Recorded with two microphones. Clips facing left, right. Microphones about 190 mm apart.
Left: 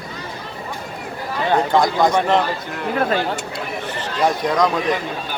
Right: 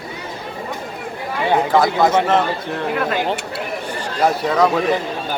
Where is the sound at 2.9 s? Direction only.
35° left (ahead or behind).